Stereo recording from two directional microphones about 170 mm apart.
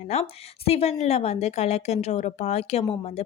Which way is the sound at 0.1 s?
35° left (ahead or behind).